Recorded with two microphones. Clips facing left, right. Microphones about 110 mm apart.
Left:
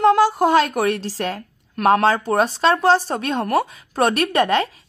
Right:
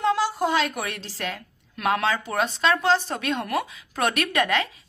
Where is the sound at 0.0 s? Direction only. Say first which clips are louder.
Left 8 dB; 50° left (ahead or behind); by 4.6 s 30° left (ahead or behind).